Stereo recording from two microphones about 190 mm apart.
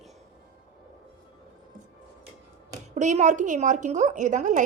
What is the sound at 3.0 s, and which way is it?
A woman's voice, 40° right (ahead or behind).